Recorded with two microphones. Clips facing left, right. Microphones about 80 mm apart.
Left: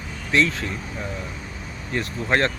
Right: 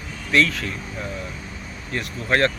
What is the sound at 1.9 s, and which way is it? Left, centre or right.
Speech, left.